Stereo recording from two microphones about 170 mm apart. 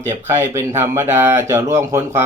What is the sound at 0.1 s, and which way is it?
Speech, 15° right (ahead or behind).